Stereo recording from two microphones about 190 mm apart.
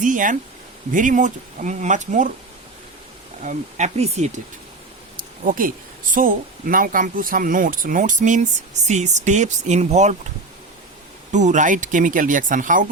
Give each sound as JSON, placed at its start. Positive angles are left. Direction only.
{"t": 0.0, "sound": "speech", "side_deg": -45}
{"t": 3.4, "sound": "speech", "side_deg": -40}
{"t": 5.1, "sound": "a sound", "side_deg": -45}
{"t": 6.1, "sound": "speech", "side_deg": -45}
{"t": 11.3, "sound": "speech", "side_deg": -40}